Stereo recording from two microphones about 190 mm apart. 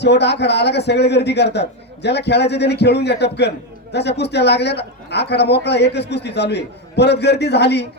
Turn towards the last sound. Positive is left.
turn(degrees=60)  # may be behind; listen again after turning